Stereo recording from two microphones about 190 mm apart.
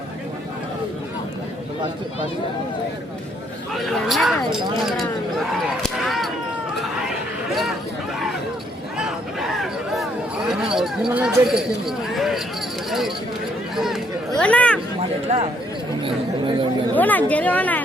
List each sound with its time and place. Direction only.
3.8 s speech: centre (ahead or behind)
5.8 s a sound: centre (ahead or behind)
9.0 s a sound: centre (ahead or behind)
10.8 s speech: 5° right (ahead or behind)
15.3 s speech: 35° right (ahead or behind)
17.0 s speech: 10° left (ahead or behind)